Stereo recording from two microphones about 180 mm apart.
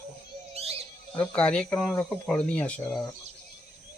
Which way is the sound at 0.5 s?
35° right (ahead or behind).